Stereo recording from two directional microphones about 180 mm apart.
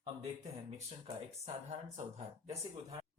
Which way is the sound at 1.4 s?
35° right (ahead or behind).